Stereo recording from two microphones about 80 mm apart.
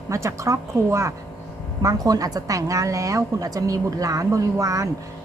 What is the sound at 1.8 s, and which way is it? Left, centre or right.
A woman's voice, right.